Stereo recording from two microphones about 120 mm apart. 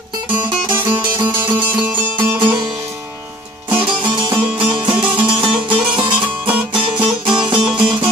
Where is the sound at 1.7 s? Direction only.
15° right (ahead or behind).